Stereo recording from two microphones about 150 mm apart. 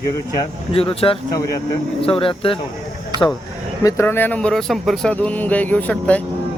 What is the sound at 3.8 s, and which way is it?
Speech, 15° left (ahead or behind).